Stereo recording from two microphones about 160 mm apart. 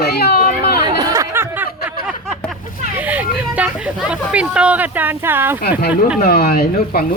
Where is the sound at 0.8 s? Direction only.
25° right (ahead or behind).